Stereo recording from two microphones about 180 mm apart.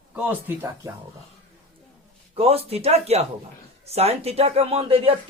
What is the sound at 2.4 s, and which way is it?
Speech, 35° right (ahead or behind).